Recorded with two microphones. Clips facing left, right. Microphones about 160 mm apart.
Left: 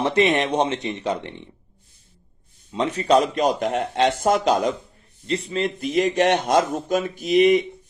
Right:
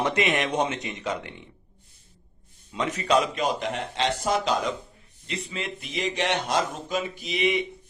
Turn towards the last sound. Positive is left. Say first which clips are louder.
# left 9 dB
turn(degrees=45)  # may be behind; listen again after turning